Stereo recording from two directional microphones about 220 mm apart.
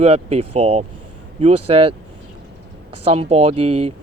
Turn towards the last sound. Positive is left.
turn(degrees=-25)  # may be behind; listen again after turning